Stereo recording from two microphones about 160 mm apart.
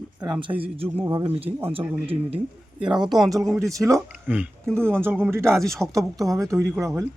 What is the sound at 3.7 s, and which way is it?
Speech, 20° right (ahead or behind).